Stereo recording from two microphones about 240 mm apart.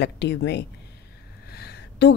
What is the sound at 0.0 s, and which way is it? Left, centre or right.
Speech, left.